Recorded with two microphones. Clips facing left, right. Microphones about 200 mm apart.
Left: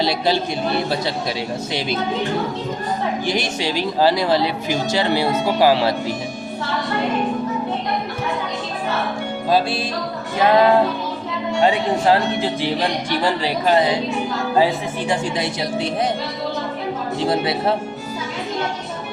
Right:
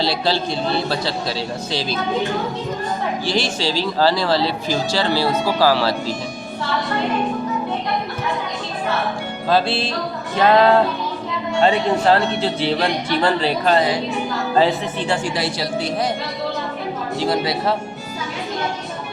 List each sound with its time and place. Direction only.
3.2 s a woman's voice: 20° left (ahead or behind)
9.5 s a woman's voice: 10° left (ahead or behind)
17.2 s a woman's voice: 25° left (ahead or behind)